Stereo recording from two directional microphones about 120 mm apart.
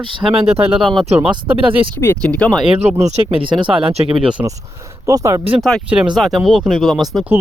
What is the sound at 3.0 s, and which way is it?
Speech, 65° right (ahead or behind).